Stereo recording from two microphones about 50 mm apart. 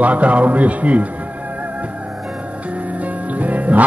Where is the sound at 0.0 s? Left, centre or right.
Right.